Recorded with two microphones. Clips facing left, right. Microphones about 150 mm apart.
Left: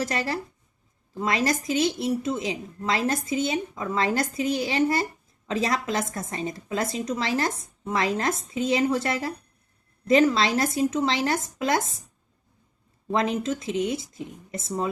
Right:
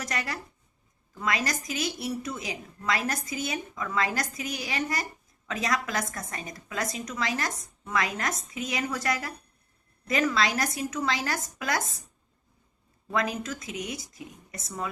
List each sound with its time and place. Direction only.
0.0 s a woman's voice: 30° left (ahead or behind)
13.1 s a woman's voice: 25° left (ahead or behind)